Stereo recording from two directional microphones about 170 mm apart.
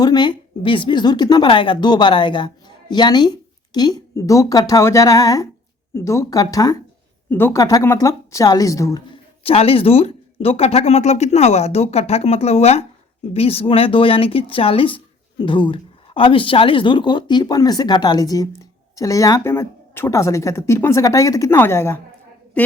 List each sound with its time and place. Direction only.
0.0 s speech: 25° left (ahead or behind)
9.4 s speech: 35° left (ahead or behind); by 22.0 s 15° left (ahead or behind)